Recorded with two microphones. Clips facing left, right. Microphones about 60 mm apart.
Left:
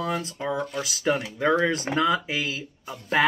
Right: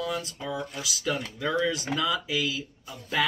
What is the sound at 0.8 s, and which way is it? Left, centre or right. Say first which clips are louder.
Speech: left 5 dB; left.